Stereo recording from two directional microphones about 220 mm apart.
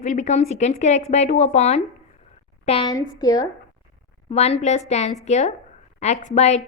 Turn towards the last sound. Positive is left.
turn(degrees=30)  # may be behind; listen again after turning